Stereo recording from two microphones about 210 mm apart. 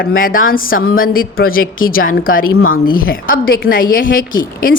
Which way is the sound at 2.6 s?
80° left.